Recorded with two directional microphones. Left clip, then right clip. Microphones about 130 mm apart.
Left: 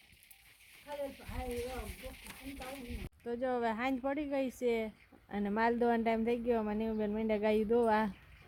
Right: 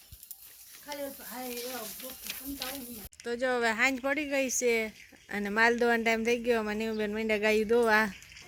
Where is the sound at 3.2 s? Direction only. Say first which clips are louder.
Right 6 dB; 10° left (ahead or behind).